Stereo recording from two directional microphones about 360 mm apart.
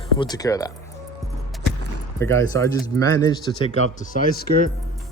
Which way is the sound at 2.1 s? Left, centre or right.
Centre.